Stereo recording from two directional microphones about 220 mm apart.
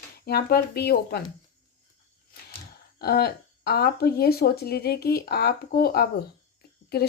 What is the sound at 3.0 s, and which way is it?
Speech, 45° left (ahead or behind).